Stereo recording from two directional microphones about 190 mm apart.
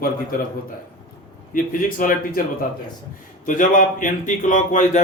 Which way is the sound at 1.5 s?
45° left (ahead or behind).